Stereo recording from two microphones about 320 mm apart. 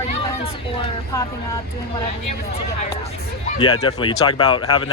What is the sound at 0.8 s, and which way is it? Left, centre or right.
Speech, centre.